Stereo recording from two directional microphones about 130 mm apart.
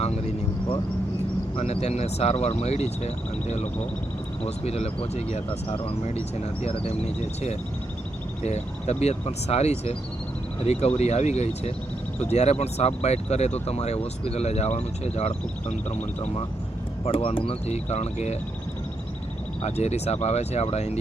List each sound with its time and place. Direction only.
1.5 s speech: 55° left (ahead or behind)
19.6 s speech: 55° left (ahead or behind)